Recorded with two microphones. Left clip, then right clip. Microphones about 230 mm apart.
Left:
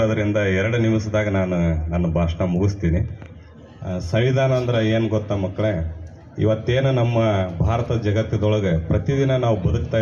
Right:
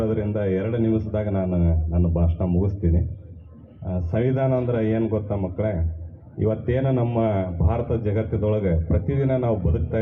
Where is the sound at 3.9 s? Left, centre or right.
Left.